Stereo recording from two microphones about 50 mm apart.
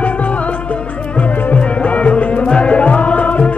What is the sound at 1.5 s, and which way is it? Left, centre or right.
Music, left.